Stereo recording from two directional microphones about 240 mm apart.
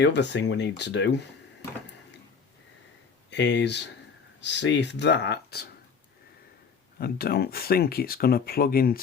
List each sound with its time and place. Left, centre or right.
0.0 s speech: left
3.2 s speech: left
7.0 s speech: left